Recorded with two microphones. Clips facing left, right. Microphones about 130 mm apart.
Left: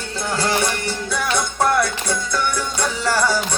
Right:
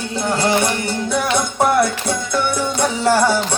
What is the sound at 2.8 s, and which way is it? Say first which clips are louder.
Music: right 5 dB; 25° right (ahead or behind).